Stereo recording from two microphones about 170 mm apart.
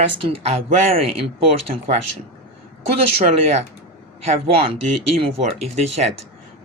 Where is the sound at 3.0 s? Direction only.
40° right (ahead or behind).